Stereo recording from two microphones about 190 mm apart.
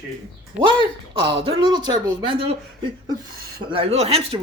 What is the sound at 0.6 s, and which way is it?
Speech, 25° right (ahead or behind).